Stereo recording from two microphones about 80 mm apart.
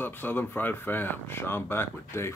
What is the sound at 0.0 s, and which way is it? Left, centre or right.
Speech, left.